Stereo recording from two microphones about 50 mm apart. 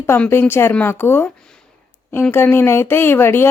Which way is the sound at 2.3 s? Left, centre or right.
Left.